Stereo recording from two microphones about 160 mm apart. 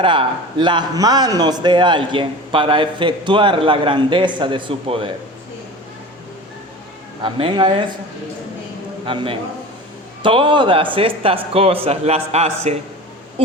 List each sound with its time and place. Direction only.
0.0 s a man's voice: 30° right (ahead or behind)
7.2 s a man's voice: 30° right (ahead or behind)
9.0 s a man's voice: 35° right (ahead or behind)